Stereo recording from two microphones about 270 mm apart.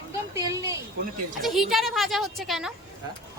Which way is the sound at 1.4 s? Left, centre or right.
Centre.